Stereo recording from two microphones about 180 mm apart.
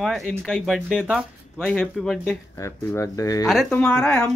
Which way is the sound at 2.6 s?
15° left (ahead or behind).